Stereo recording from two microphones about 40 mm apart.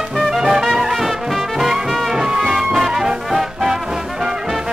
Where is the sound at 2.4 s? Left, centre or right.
Centre.